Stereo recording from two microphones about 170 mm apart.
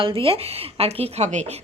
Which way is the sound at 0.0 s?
30° right (ahead or behind).